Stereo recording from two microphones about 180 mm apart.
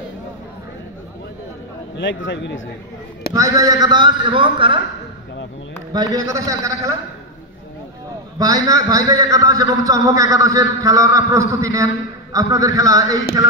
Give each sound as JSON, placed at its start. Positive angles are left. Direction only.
{"t": 2.0, "sound": "a man's voice", "side_deg": 90}
{"t": 3.3, "sound": "a man's voice", "side_deg": -20}
{"t": 5.9, "sound": "a man's voice", "side_deg": -20}
{"t": 8.4, "sound": "a man's voice", "side_deg": -20}